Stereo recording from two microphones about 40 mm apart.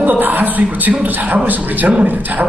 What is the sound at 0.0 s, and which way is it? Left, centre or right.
A man's voice, right.